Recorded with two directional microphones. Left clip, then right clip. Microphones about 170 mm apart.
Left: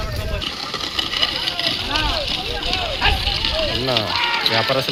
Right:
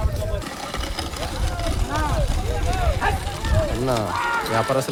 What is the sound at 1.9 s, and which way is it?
Vehicle, 35° left (ahead or behind).